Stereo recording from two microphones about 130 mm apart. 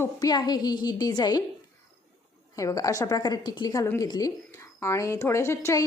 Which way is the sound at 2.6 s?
25° left (ahead or behind).